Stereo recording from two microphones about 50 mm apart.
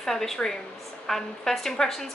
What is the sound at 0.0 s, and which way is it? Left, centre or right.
A woman's voice, centre.